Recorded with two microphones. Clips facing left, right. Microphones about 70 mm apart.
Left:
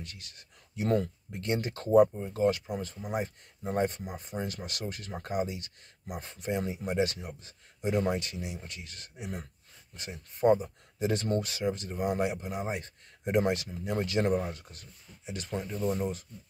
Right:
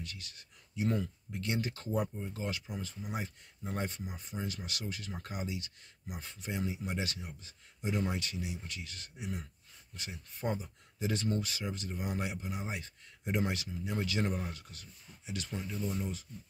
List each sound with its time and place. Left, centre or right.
0.0 s speech: left
15.8 s speech: left